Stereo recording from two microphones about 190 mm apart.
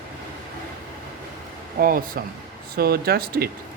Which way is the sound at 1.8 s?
50° right (ahead or behind).